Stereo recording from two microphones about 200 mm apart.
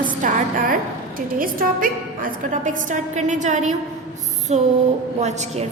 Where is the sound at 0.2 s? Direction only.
40° right (ahead or behind).